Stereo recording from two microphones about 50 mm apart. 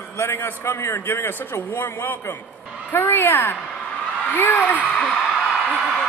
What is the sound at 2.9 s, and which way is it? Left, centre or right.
A man's voice, left.